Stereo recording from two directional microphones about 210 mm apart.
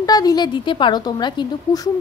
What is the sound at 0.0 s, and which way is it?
A woman's voice, 20° left (ahead or behind).